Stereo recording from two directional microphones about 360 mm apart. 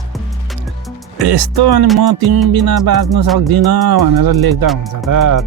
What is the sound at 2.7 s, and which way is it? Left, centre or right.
Speech, right.